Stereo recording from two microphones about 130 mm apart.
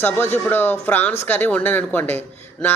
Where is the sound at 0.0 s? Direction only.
15° left (ahead or behind).